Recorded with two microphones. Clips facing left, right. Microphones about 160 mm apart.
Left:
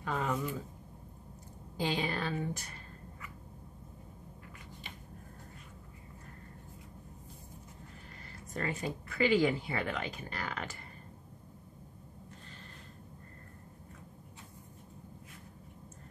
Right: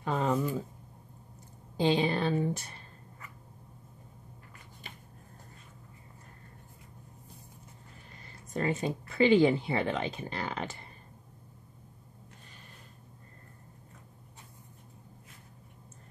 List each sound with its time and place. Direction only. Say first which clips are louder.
0.0 s speech: right 5 dB; 25° right (ahead or behind)
1.8 s speech: right 7 dB; 25° right (ahead or behind)
8.5 s speech: right 6 dB; 20° right (ahead or behind)